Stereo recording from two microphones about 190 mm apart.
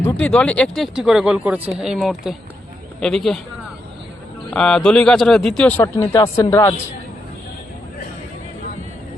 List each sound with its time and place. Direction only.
0.0 s speech: 5° left (ahead or behind)
4.5 s speech: 5° left (ahead or behind)